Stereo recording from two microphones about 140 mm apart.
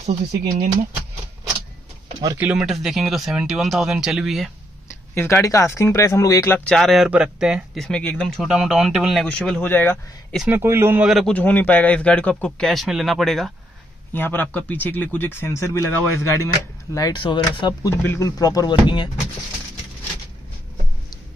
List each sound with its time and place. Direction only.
0.0 s speech: 70° right (ahead or behind)
2.3 s speech: 10° right (ahead or behind)
5.1 s speech: 20° left (ahead or behind)
6.7 s speech: centre (ahead or behind)
9.6 s speech: 15° left (ahead or behind)
10.5 s a man's voice: 15° right (ahead or behind)
11.1 s speech: 5° left (ahead or behind)
14.1 s speech: 15° left (ahead or behind); by 19.0 s 35° left (ahead or behind)